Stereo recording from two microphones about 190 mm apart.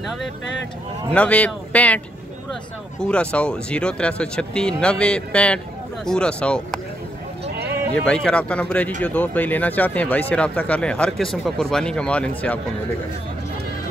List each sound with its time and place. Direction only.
1.1 s speech: 5° left (ahead or behind)
3.0 s speech: 5° left (ahead or behind)
7.4 s sheep: 60° right (ahead or behind)
7.9 s speech: 5° left (ahead or behind)